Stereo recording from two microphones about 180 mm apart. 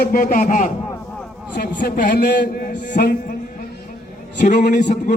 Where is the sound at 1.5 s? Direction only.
60° left (ahead or behind).